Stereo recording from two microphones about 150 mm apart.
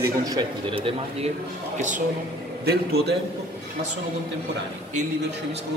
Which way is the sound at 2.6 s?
90° right.